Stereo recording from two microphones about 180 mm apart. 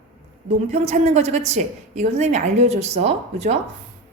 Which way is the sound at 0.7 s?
40° right (ahead or behind).